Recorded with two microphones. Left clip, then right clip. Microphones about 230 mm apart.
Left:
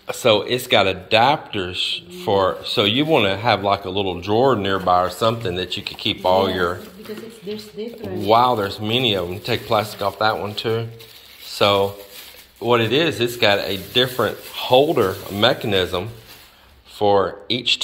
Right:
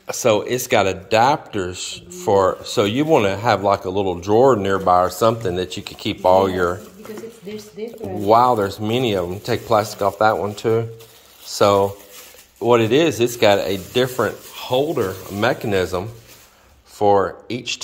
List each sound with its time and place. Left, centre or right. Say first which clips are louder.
0.0 s speech: left 1 dB; centre
8.3 s speech: right 2 dB; right
14.5 s speech: left 5 dB; centre